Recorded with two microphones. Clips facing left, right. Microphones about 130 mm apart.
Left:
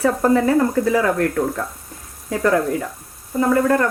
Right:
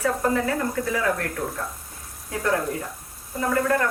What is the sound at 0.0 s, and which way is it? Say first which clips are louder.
Speech: left 7 dB; 40° left (ahead or behind).